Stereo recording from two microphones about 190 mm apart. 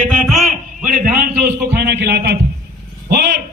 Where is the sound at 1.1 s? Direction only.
50° right (ahead or behind).